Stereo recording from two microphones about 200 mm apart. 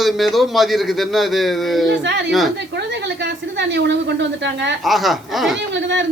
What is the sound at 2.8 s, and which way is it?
A woman's voice, 60° right (ahead or behind).